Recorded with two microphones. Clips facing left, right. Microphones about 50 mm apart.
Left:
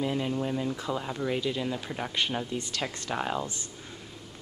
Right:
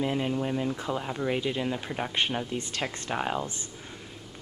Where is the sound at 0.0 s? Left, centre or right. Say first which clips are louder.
Right 1 dB; centre.